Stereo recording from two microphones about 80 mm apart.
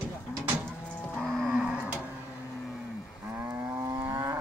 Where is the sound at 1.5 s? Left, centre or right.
Centre.